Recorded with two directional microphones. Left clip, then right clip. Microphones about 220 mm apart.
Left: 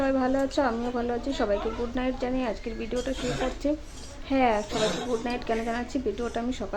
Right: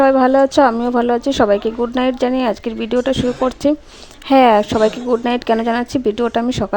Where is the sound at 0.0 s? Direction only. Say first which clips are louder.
Right 14 dB; 45° right (ahead or behind).